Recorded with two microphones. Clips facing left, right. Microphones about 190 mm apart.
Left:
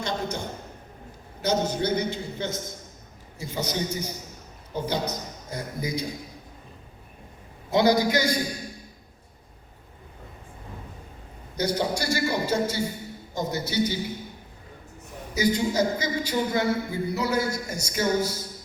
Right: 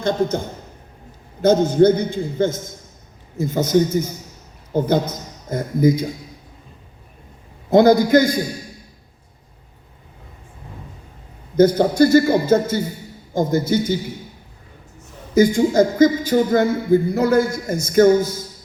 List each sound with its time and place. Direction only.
0.0 s a man's voice: 50° right (ahead or behind)
7.7 s speech: 50° right (ahead or behind)
11.5 s speech: 50° right (ahead or behind)
15.4 s speech: 50° right (ahead or behind)